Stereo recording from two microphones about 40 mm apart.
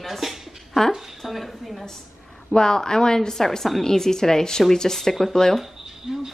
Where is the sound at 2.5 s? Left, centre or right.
Centre.